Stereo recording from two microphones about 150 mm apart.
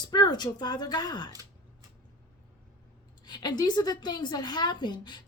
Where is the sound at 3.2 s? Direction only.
30° left (ahead or behind).